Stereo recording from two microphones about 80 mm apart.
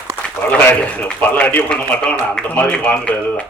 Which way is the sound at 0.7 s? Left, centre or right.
Centre.